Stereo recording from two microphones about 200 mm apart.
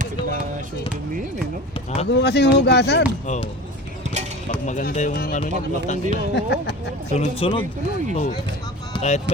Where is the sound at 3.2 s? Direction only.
35° left (ahead or behind).